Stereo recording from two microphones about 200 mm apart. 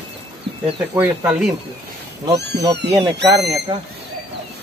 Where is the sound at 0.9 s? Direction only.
5° right (ahead or behind).